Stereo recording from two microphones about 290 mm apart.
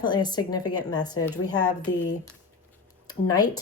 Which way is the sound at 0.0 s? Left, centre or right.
Centre.